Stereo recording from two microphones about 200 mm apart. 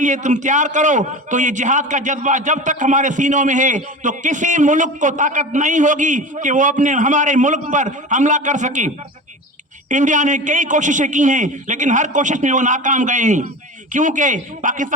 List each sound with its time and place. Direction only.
0.0 s a man's voice: 35° right (ahead or behind)
9.9 s a man's voice: 40° right (ahead or behind)